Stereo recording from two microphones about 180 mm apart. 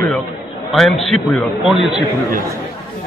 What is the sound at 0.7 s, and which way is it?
Speech, centre (ahead or behind).